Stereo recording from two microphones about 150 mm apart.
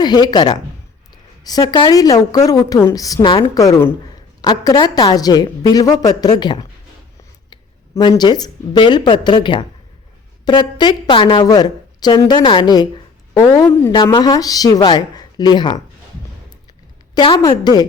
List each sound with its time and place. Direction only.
0.0 s a woman's voice: 30° left (ahead or behind)
13.9 s a woman's voice: 30° left (ahead or behind)
17.4 s a woman's voice: 25° left (ahead or behind)